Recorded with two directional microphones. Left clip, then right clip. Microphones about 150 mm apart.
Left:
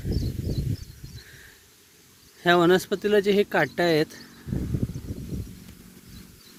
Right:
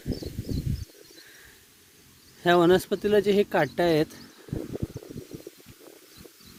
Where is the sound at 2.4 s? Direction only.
15° right (ahead or behind).